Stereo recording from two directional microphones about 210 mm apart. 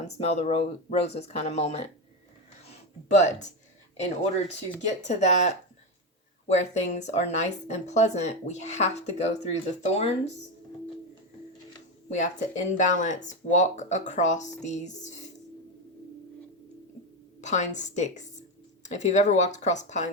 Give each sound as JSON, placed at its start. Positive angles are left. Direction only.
{"t": 0.0, "sound": "speech", "side_deg": 30}
{"t": 3.1, "sound": "speech", "side_deg": 35}
{"t": 4.9, "sound": "speech", "side_deg": 35}
{"t": 12.0, "sound": "speech", "side_deg": 35}
{"t": 17.4, "sound": "speech", "side_deg": 35}